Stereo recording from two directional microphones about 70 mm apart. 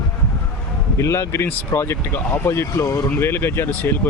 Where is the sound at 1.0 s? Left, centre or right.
Left.